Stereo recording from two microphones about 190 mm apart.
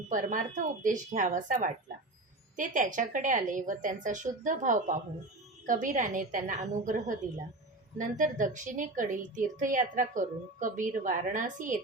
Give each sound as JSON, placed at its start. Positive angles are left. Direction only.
{"t": 0.1, "sound": "a woman's voice", "side_deg": -40}